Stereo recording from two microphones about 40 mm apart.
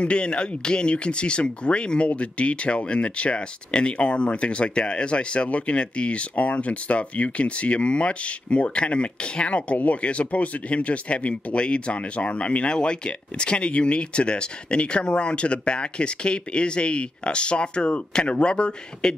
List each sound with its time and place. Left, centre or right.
0.0 s speech: left